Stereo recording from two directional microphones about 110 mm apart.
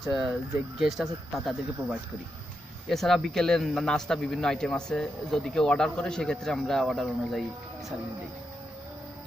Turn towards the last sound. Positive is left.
turn(degrees=0)  # may be behind; listen again after turning